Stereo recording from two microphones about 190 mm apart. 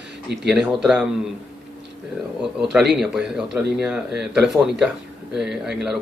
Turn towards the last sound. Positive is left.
turn(degrees=-5)  # may be behind; listen again after turning